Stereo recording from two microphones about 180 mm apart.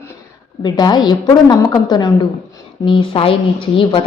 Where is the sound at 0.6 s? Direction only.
25° left (ahead or behind).